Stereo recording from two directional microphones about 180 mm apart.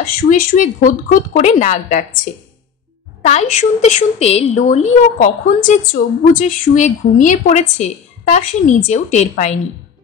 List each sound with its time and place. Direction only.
0.0 s speech: 45° left (ahead or behind)
3.2 s a woman's voice: 40° left (ahead or behind)